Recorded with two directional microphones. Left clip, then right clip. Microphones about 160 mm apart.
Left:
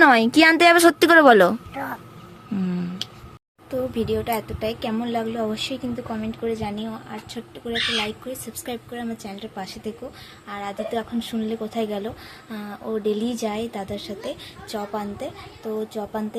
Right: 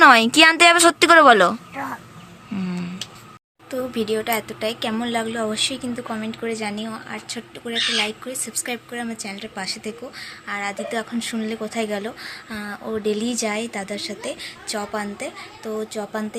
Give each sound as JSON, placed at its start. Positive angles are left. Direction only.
{"t": 0.0, "sound": "a woman's voice", "side_deg": 20}
{"t": 2.6, "sound": "a sound", "side_deg": 25}
{"t": 3.7, "sound": "a woman's voice", "side_deg": 5}